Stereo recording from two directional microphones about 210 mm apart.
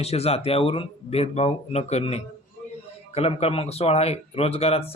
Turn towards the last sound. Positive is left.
turn(degrees=30)  # may be behind; listen again after turning